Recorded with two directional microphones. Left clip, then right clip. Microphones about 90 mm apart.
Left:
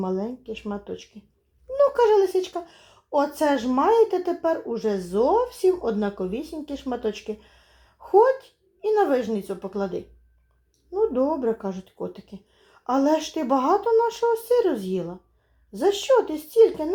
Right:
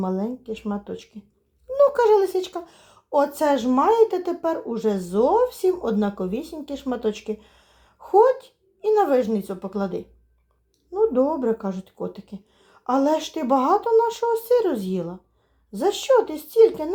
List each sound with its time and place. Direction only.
0.0 s speech: 35° right (ahead or behind)